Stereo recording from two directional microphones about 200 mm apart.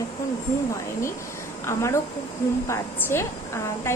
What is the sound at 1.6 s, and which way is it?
A woman's voice, 15° left (ahead or behind).